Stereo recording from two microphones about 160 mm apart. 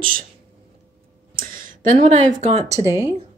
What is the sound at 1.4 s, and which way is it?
Speech, 60° right (ahead or behind).